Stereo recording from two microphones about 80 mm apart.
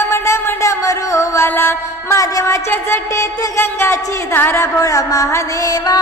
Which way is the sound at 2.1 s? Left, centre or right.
Left.